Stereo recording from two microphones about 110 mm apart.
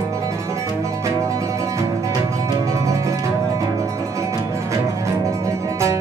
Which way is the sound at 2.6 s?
30° right (ahead or behind).